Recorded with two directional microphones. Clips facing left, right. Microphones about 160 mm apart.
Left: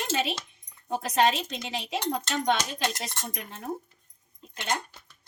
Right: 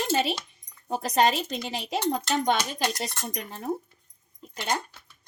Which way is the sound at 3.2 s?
35° right (ahead or behind).